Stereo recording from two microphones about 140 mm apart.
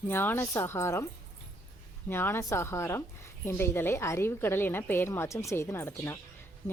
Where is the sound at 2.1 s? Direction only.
15° left (ahead or behind).